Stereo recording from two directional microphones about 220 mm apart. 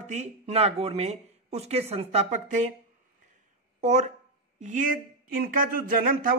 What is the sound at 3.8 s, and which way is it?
Speech, 30° right (ahead or behind).